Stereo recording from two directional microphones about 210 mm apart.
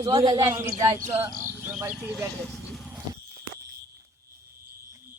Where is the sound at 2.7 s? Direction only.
Centre (ahead or behind).